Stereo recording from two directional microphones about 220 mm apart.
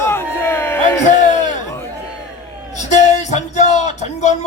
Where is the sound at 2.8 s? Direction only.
30° left (ahead or behind).